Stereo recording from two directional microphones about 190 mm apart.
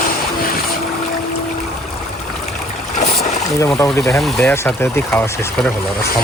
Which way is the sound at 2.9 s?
40° left (ahead or behind).